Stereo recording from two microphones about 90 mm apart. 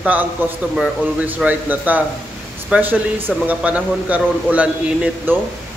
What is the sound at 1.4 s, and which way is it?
Speech, 20° right (ahead or behind).